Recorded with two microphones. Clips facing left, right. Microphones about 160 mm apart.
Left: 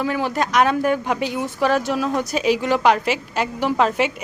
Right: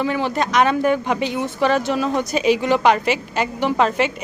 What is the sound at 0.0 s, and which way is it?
A woman's voice, 5° left (ahead or behind).